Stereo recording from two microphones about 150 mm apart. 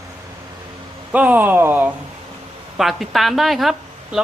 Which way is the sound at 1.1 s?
10° right (ahead or behind).